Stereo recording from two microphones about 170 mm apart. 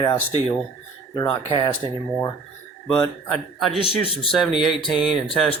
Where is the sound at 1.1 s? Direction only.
25° left (ahead or behind).